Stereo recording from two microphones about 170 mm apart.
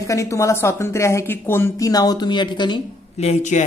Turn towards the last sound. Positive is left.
turn(degrees=45)  # may be behind; listen again after turning